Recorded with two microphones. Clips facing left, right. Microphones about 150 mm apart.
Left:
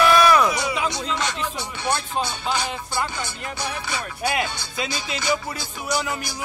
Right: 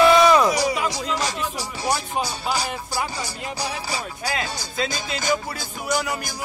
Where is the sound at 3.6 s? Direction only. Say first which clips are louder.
Even; 35° right (ahead or behind).